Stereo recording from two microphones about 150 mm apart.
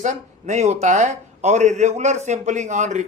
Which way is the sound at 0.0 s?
55° right (ahead or behind).